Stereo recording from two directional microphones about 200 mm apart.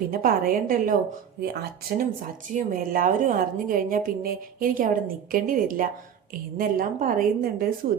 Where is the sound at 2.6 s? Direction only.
45° right (ahead or behind).